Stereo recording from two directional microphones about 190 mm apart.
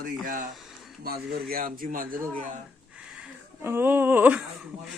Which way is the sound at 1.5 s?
50° right (ahead or behind).